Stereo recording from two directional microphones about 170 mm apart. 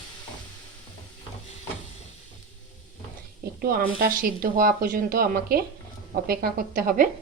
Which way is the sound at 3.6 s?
60° right (ahead or behind).